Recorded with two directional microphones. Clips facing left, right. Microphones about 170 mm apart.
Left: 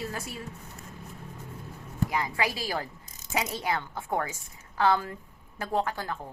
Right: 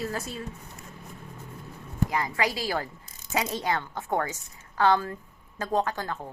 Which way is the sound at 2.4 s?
15° right (ahead or behind).